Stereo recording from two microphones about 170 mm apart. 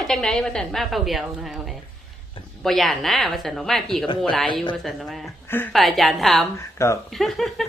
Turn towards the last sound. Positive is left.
turn(degrees=0)  # may be behind; listen again after turning